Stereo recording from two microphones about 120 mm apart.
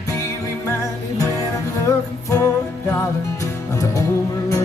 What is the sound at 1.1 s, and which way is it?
Music, 30° left (ahead or behind).